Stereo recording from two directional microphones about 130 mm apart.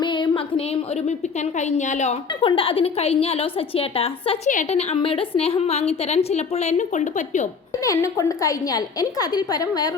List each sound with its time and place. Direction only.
0.0 s a sound: 35° left (ahead or behind)
1.5 s a woman's voice: 65° left (ahead or behind)
2.4 s a woman's voice: 40° left (ahead or behind); by 7.4 s 70° left (ahead or behind)
7.9 s a woman's voice: 25° left (ahead or behind)